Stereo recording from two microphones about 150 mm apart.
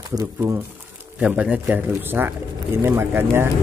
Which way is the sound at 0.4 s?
15° right (ahead or behind).